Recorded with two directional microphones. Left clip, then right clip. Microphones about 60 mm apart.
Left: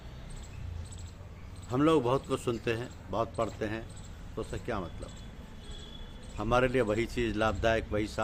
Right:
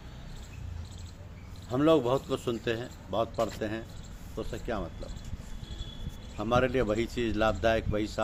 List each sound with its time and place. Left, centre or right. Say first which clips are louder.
1.7 s a man's voice: right 2 dB; left
6.3 s a man's voice: even; left